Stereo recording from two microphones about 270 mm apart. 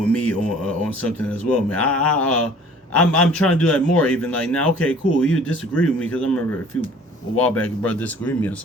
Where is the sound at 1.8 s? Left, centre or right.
Left.